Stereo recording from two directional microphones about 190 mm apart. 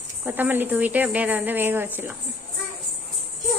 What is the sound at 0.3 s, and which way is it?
Speech, 10° right (ahead or behind).